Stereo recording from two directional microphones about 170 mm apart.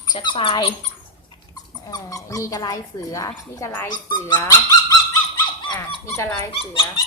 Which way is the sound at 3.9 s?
25° left (ahead or behind).